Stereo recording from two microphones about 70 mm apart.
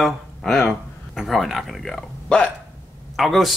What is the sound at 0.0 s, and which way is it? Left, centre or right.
Speech, centre.